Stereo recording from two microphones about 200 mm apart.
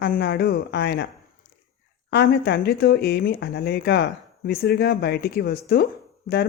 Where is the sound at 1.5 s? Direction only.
50° left (ahead or behind).